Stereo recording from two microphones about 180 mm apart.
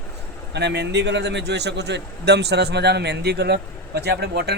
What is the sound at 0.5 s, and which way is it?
A man's voice, 70° right (ahead or behind).